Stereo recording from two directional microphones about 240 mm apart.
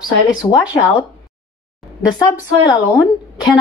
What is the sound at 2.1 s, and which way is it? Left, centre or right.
Speech, centre.